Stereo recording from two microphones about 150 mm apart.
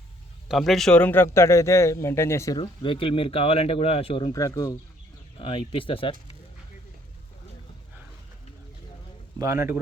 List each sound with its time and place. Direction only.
0.4 s a man's voice: centre (ahead or behind); by 2.6 s 20° left (ahead or behind)
2.6 s speech: 35° left (ahead or behind)
4.3 s speech: 20° left (ahead or behind)
5.4 s speech: 35° left (ahead or behind)
9.4 s a man's voice: 20° right (ahead or behind)